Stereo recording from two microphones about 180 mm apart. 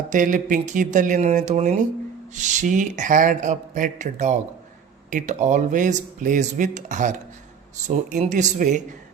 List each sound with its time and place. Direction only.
0.1 s speech: 45° right (ahead or behind)